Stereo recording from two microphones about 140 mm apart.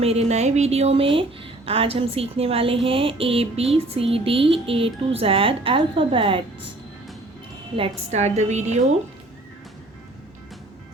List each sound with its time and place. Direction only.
0.0 s speech: 50° right (ahead or behind)
7.8 s a woman's voice: 55° right (ahead or behind)